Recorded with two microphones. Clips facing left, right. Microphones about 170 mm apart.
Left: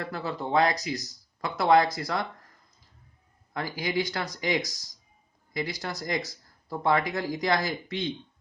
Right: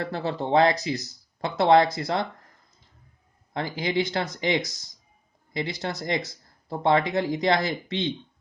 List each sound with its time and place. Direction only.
0.0 s speech: 30° right (ahead or behind)
3.5 s speech: 25° right (ahead or behind)